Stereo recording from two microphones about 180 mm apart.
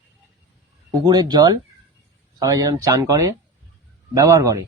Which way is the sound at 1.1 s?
20° right (ahead or behind).